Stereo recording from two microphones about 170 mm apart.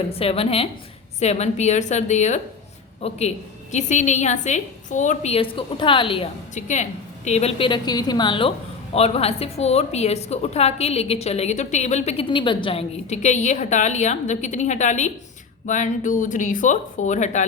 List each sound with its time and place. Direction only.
0.1 s a woman's voice: 35° left (ahead or behind)
6.5 s a woman's voice: 45° left (ahead or behind); by 12.8 s 30° left (ahead or behind)
13.1 s a woman's voice: 45° left (ahead or behind)